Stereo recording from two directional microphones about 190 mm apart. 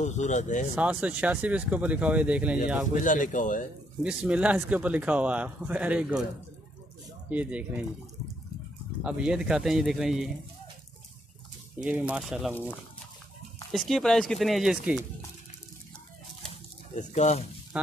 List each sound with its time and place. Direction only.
0.0 s speech: 40° left (ahead or behind)
0.7 s speech: 5° right (ahead or behind)
2.9 s speech: 40° left (ahead or behind)
4.0 s speech: 5° right (ahead or behind)
7.2 s speech: 10° right (ahead or behind)
9.0 s speech: 5° right (ahead or behind)
11.8 s speech: 5° right (ahead or behind)
13.7 s speech: centre (ahead or behind)
16.9 s speech: 35° left (ahead or behind)